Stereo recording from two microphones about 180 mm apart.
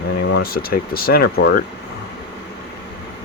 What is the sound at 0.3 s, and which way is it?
Speech, 55° left (ahead or behind).